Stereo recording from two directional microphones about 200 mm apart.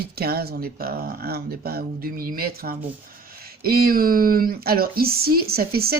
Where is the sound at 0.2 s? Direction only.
50° right (ahead or behind).